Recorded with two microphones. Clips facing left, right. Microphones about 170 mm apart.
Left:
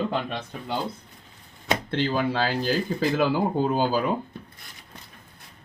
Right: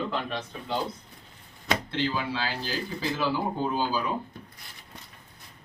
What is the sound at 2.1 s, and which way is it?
Speech, 50° left (ahead or behind).